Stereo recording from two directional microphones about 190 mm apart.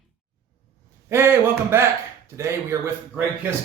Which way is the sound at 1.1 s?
15° right (ahead or behind).